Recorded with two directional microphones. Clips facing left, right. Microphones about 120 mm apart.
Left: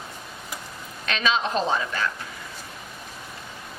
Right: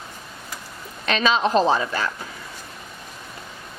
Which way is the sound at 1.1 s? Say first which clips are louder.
Right 5 dB; 35° right (ahead or behind).